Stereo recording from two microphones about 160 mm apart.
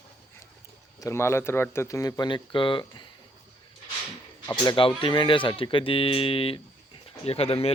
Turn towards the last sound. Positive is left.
turn(degrees=40)  # may be behind; listen again after turning